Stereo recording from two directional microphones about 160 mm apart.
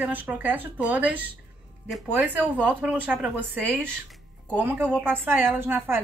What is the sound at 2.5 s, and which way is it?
Speech, 10° right (ahead or behind).